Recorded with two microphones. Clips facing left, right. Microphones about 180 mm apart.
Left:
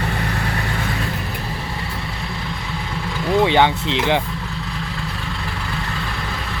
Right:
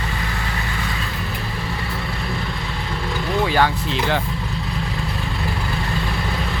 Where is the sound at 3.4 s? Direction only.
20° left (ahead or behind).